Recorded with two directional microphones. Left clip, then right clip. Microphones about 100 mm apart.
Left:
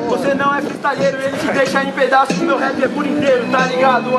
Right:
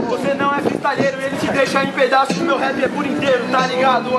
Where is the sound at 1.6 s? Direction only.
Centre (ahead or behind).